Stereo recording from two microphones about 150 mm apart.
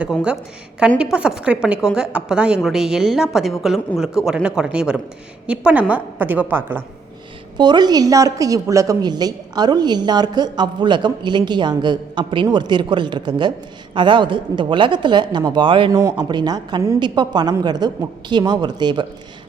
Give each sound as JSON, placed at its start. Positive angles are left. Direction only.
{"t": 0.0, "sound": "a woman's voice", "side_deg": -5}
{"t": 7.6, "sound": "a woman's voice", "side_deg": -30}
{"t": 15.9, "sound": "a woman's voice", "side_deg": -20}